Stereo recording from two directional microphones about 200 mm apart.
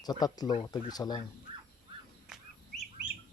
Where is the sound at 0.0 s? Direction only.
20° left (ahead or behind).